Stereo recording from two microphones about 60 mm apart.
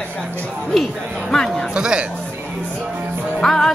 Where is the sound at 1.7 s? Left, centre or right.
Centre.